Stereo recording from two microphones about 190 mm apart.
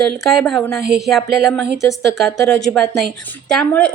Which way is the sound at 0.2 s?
Centre (ahead or behind).